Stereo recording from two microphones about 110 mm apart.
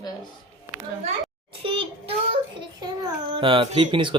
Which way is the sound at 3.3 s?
50° right (ahead or behind).